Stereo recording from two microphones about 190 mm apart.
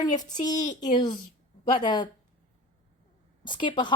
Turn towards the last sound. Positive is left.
turn(degrees=25)  # may be behind; listen again after turning